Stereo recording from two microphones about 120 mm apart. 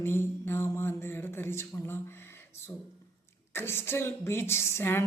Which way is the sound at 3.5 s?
20° left (ahead or behind).